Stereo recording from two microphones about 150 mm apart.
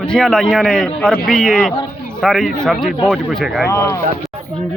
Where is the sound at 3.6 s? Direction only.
20° left (ahead or behind).